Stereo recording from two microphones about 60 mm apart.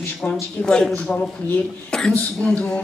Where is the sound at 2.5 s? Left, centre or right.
Centre.